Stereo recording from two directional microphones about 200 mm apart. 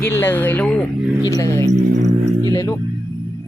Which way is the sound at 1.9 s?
35° right (ahead or behind).